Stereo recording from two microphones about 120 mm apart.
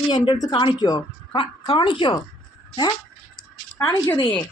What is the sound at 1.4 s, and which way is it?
Speech, 45° left (ahead or behind).